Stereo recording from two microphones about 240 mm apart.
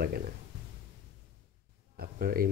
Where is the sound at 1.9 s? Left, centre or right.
Right.